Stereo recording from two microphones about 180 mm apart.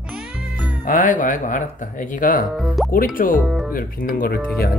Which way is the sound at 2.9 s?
50° left (ahead or behind).